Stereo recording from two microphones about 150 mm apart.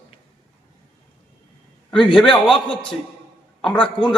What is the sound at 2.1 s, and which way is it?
A man's voice, 5° left (ahead or behind).